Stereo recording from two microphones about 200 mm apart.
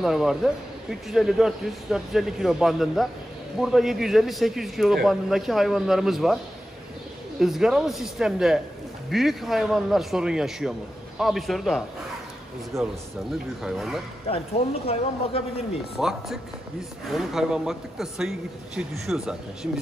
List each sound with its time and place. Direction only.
0.0 s a man's voice: centre (ahead or behind)
13.6 s a man's voice: centre (ahead or behind)
14.2 s speech: 30° left (ahead or behind)
16.0 s a man's voice: centre (ahead or behind)